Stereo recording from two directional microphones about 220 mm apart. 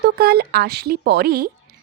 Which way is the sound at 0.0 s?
45° right (ahead or behind).